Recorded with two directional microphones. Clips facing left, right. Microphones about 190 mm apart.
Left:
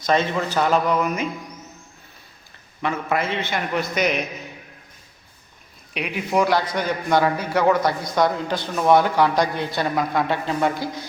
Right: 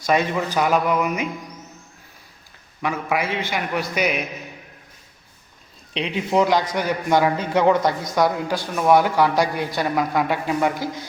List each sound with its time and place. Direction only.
0.0 s a man's voice: 10° right (ahead or behind)
2.8 s a man's voice: 10° right (ahead or behind)
5.9 s a man's voice: 25° right (ahead or behind)